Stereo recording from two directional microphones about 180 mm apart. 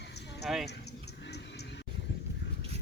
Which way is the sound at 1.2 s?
65° left (ahead or behind).